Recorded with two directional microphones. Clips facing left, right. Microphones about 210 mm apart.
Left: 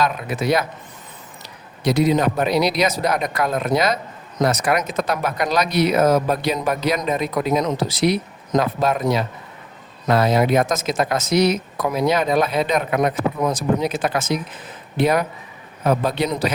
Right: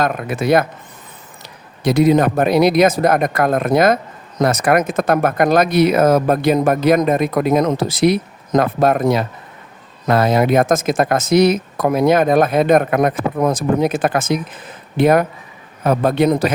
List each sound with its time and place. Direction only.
0.0 s a man's voice: 50° right (ahead or behind)
1.8 s a man's voice: 50° right (ahead or behind)